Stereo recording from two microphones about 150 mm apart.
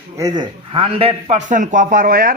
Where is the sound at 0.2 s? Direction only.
25° right (ahead or behind).